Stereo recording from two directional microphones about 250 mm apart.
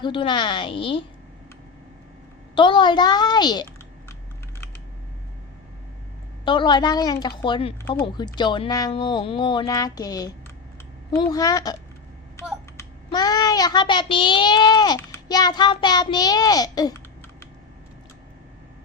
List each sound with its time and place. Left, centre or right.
0.0 s a woman's voice: centre
2.6 s a child's voice: centre
6.4 s a child's voice: centre